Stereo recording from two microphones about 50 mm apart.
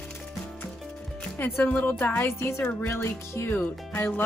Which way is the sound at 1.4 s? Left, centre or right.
Left.